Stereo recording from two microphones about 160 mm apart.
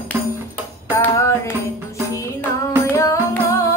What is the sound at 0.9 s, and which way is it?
Music, 15° left (ahead or behind).